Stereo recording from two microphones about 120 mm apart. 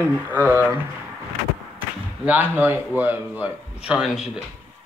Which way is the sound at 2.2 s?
15° right (ahead or behind).